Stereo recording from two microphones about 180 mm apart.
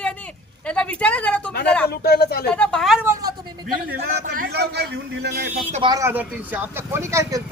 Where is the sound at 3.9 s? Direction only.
55° right (ahead or behind).